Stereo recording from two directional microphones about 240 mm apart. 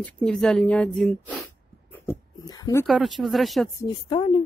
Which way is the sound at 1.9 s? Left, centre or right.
Centre.